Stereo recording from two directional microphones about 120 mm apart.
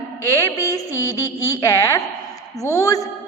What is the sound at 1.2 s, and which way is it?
A woman's voice, 30° left (ahead or behind).